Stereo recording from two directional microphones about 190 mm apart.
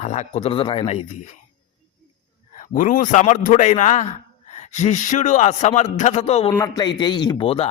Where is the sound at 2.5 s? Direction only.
45° left (ahead or behind).